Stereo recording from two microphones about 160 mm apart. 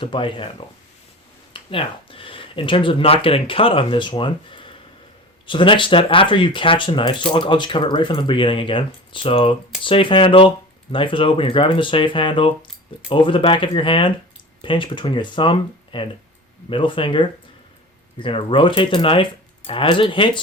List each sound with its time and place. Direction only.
0.0 s speech: 30° left (ahead or behind)
1.5 s speech: 35° left (ahead or behind)